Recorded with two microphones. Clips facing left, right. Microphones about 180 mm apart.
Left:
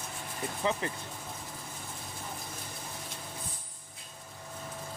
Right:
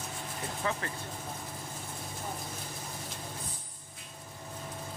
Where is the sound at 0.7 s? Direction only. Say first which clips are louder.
Left 4 dB; 20° left (ahead or behind).